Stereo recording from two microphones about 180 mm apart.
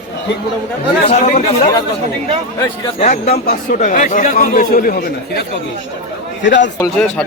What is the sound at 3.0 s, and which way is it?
Speech, 40° left (ahead or behind).